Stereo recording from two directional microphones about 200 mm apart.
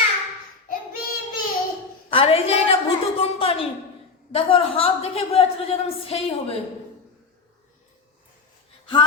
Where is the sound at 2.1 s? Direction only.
30° left (ahead or behind).